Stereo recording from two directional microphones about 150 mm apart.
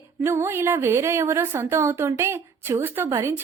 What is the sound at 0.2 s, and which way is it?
A woman's voice, 15° right (ahead or behind).